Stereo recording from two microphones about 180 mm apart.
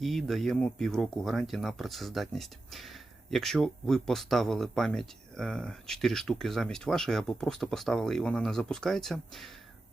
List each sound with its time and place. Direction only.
0.0 s speech: centre (ahead or behind)